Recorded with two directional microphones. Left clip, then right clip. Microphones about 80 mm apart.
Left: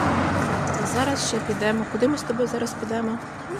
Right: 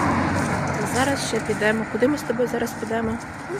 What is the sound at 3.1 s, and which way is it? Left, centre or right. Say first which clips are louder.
Speech: right 1 dB; centre.